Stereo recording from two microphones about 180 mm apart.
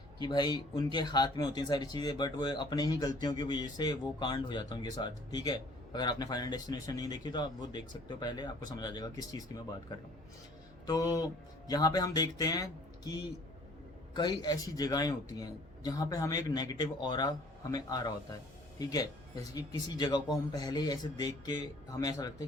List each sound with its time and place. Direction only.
0.2 s speech: 25° left (ahead or behind)
10.8 s speech: 20° left (ahead or behind)
14.2 s speech: 25° left (ahead or behind)